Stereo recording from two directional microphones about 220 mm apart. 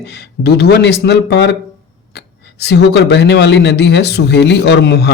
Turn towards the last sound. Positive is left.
turn(degrees=50)  # may be behind; listen again after turning